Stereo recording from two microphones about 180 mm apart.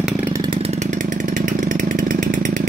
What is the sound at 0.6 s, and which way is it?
Chainsaw, 40° right (ahead or behind).